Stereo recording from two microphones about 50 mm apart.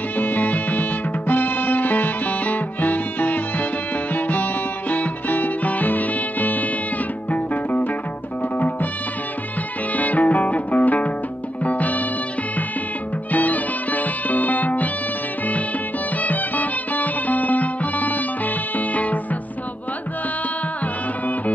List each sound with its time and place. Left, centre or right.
0.2 s music: left
9.9 s music: left
13.3 s music: left
16.2 s music: left
20.8 s music: left